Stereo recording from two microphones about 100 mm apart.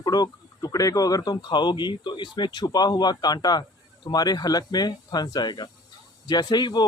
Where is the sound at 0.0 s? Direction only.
45° left (ahead or behind).